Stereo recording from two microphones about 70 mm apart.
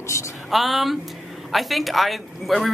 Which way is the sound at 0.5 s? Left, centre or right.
Centre.